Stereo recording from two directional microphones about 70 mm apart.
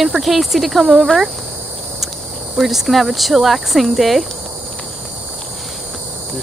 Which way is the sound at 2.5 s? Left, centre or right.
Centre.